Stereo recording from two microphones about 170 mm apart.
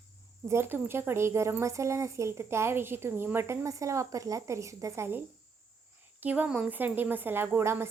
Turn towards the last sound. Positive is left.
turn(degrees=-15)  # may be behind; listen again after turning